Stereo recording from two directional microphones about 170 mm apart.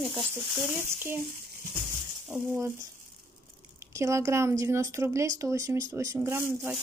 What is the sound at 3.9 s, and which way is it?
Speech, 15° right (ahead or behind).